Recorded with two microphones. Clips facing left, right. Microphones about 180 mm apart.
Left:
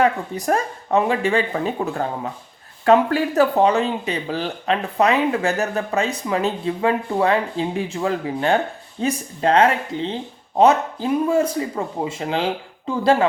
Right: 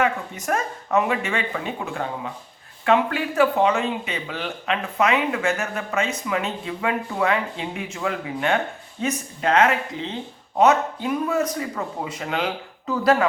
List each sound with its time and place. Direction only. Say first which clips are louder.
0.0 s speech: left 4 dB; 35° left (ahead or behind)